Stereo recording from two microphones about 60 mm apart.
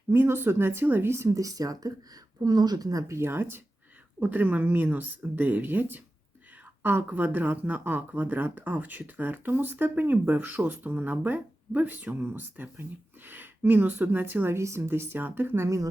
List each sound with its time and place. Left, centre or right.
0.1 s a woman's voice: right
1.4 s a woman's voice: right
3.1 s speech: right
4.2 s a woman's voice: right
14.5 s speech: right
14.8 s a woman's voice: right
15.6 s speech: right